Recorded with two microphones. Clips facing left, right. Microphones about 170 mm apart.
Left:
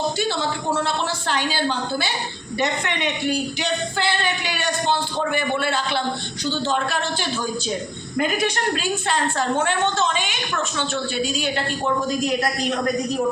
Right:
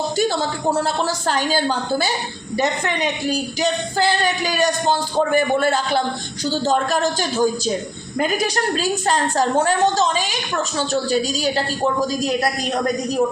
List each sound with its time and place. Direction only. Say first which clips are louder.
0.2 s a woman's voice: right 4 dB; 40° right (ahead or behind)